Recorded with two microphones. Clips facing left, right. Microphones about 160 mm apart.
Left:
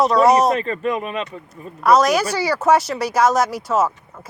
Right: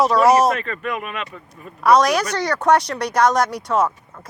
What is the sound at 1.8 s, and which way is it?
Speech, centre (ahead or behind).